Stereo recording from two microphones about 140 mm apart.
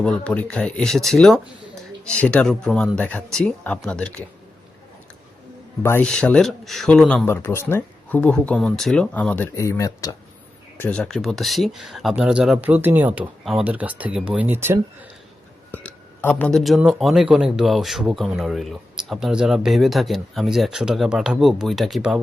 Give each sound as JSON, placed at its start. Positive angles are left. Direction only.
{"t": 0.0, "sound": "speech", "side_deg": 5}
{"t": 5.8, "sound": "speech", "side_deg": 15}
{"t": 6.1, "sound": "speech", "side_deg": 5}
{"t": 7.3, "sound": "speech", "side_deg": 15}
{"t": 10.8, "sound": "speech", "side_deg": 10}
{"t": 13.4, "sound": "speech", "side_deg": 0}
{"t": 15.7, "sound": "speech", "side_deg": 10}